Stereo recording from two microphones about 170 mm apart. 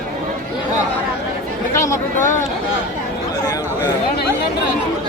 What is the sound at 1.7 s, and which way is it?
Speech, 15° left (ahead or behind).